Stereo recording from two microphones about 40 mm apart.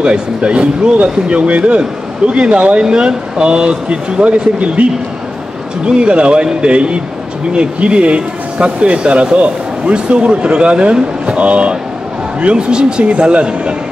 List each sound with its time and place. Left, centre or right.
0.0 s speech: right
5.9 s speech: right